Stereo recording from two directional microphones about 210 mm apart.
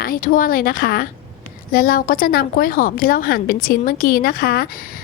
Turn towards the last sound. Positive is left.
turn(degrees=45)  # may be behind; listen again after turning